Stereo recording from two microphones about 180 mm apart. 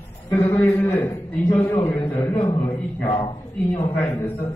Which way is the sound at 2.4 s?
25° left (ahead or behind).